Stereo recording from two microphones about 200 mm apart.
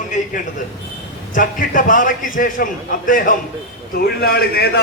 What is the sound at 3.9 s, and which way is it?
Speech, 50° left (ahead or behind).